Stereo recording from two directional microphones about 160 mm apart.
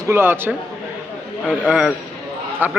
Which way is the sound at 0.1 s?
15° right (ahead or behind).